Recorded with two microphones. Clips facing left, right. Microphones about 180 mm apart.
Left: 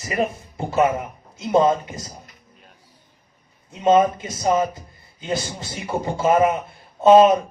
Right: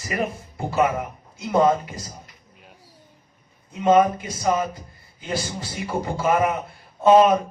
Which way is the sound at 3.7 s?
25° left (ahead or behind).